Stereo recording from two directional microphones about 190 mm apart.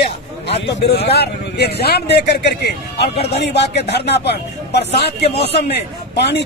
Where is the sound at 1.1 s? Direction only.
60° left (ahead or behind).